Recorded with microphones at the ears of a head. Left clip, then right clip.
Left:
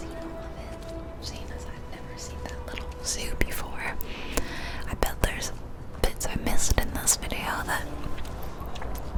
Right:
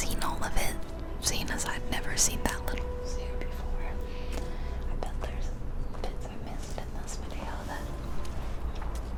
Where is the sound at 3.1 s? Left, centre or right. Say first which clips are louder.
Left 8 dB; left.